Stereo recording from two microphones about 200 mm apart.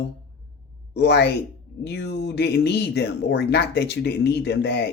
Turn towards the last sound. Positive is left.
turn(degrees=55)  # may be behind; listen again after turning